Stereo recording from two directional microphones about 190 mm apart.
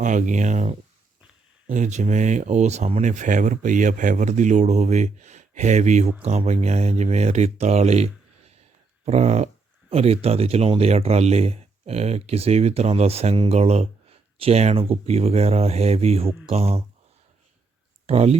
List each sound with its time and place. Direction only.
0.0 s speech: 40° right (ahead or behind)
18.0 s speech: 35° right (ahead or behind)